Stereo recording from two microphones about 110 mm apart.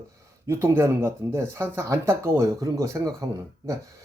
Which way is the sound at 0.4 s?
20° right (ahead or behind).